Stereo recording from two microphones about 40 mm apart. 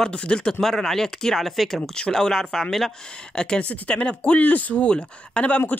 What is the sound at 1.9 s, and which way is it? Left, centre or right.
Speech, centre.